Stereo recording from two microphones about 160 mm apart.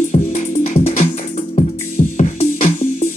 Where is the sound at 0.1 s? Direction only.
55° left (ahead or behind).